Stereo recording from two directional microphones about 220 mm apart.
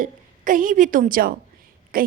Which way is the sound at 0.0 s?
35° right (ahead or behind).